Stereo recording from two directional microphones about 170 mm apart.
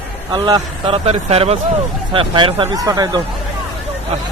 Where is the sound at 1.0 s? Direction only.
35° right (ahead or behind).